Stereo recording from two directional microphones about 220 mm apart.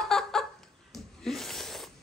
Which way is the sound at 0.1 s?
Centre (ahead or behind).